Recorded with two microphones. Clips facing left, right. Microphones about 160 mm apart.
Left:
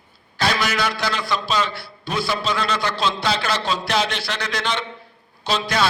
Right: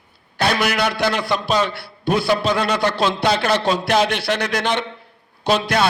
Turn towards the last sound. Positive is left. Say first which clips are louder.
# right 5 dB
turn(degrees=-60)  # may be behind; listen again after turning